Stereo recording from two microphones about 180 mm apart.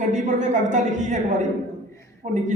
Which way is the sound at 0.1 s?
40° right (ahead or behind).